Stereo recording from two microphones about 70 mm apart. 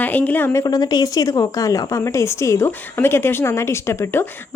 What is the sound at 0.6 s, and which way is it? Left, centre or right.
Speech, left.